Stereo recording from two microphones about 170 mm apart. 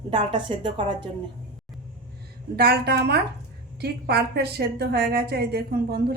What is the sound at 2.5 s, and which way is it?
A woman's voice, 65° right (ahead or behind).